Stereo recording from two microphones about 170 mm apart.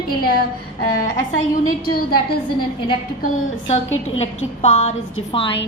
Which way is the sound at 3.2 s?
45° left (ahead or behind).